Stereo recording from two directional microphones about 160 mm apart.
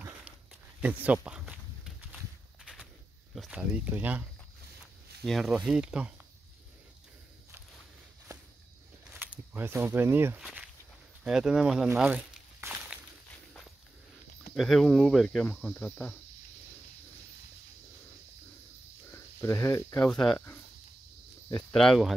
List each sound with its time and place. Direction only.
0.7 s walk: 10° right (ahead or behind)
3.3 s speech: 5° right (ahead or behind)
5.2 s speech: centre (ahead or behind)
9.2 s speech: 10° right (ahead or behind)
10.4 s walk: 5° right (ahead or behind)
14.5 s speech: centre (ahead or behind)
19.1 s speech: 15° left (ahead or behind)
20.1 s speech: 5° left (ahead or behind)
21.7 s speech: centre (ahead or behind)